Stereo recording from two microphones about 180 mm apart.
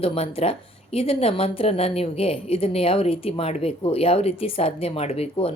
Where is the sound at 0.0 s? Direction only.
35° left (ahead or behind).